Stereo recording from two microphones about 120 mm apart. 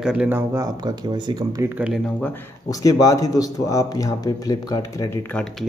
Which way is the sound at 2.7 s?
30° left (ahead or behind).